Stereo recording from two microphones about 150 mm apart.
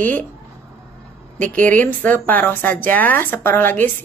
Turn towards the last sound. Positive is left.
turn(degrees=15)  # may be behind; listen again after turning